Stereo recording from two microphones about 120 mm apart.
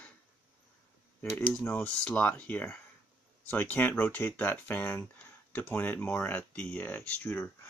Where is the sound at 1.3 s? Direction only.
20° left (ahead or behind).